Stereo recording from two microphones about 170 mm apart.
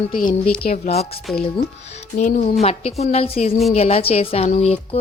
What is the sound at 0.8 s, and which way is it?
Speech, 40° left (ahead or behind).